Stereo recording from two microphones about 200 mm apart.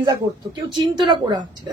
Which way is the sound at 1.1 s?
20° right (ahead or behind).